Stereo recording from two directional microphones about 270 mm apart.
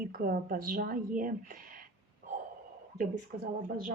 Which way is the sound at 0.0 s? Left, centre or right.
Right.